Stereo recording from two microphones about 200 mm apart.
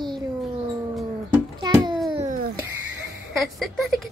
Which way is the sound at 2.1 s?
35° right (ahead or behind).